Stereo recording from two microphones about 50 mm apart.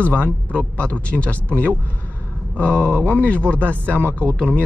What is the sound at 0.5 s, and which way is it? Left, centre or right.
Speech, left.